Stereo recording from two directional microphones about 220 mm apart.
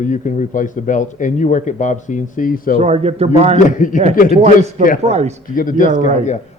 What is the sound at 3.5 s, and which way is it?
Speech, 35° left (ahead or behind).